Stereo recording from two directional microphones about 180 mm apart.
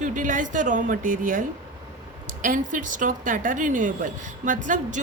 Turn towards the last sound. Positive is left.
turn(degrees=-45)  # may be behind; listen again after turning